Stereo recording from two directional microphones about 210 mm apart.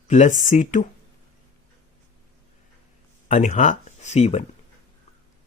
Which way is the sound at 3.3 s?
35° left (ahead or behind).